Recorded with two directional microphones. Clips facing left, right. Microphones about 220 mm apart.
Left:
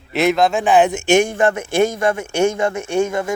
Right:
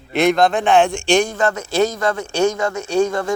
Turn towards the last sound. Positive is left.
turn(degrees=25)  # may be behind; listen again after turning